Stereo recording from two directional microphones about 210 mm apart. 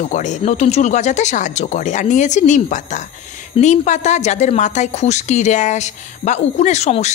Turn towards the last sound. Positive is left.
turn(degrees=30)  # may be behind; listen again after turning